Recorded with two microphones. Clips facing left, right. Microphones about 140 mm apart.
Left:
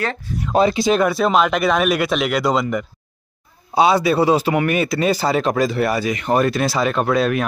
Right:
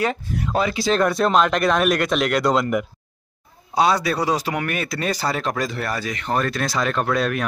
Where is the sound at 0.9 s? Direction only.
5° left (ahead or behind).